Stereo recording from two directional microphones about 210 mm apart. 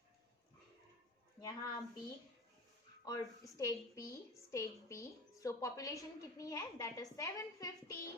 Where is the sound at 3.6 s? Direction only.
15° left (ahead or behind).